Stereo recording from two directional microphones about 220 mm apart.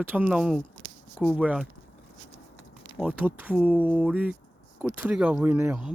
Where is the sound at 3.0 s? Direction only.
5° right (ahead or behind).